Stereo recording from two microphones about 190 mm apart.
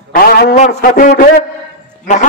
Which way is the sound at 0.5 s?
45° left (ahead or behind).